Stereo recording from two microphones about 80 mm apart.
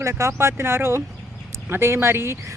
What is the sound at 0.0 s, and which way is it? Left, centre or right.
Speech, right.